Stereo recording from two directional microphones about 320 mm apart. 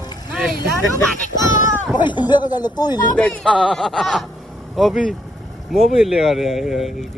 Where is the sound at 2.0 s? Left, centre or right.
Centre.